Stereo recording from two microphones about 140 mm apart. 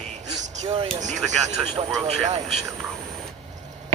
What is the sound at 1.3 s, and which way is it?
Speech, 60° right (ahead or behind).